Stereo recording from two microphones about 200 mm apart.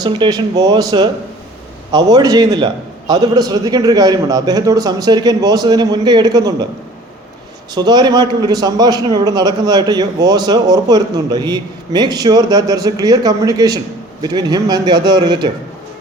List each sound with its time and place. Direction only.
0.0 s a man's voice: 20° right (ahead or behind)
7.7 s a man's voice: 20° right (ahead or behind)